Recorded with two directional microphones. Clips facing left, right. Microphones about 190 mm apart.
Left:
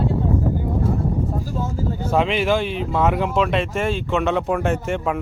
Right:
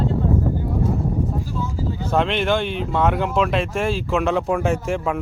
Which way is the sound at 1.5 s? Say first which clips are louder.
Left 1 dB; 50° left (ahead or behind).